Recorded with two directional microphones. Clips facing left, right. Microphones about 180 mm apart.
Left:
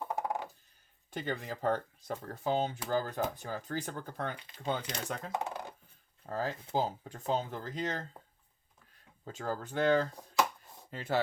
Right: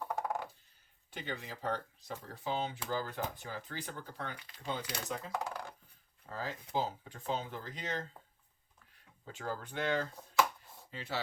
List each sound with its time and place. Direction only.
0.0 s coin: 15° left (ahead or behind)
1.1 s speech: 45° left (ahead or behind)
5.3 s a sound: 20° left (ahead or behind)
6.2 s speech: 45° left (ahead or behind)
9.2 s speech: 40° left (ahead or behind)
10.9 s speech: 50° left (ahead or behind)